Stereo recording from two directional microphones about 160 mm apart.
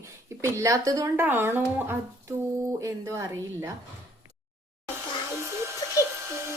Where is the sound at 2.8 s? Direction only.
20° right (ahead or behind).